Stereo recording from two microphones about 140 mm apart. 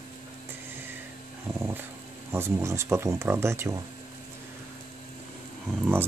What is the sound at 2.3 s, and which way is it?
Speech, 20° right (ahead or behind).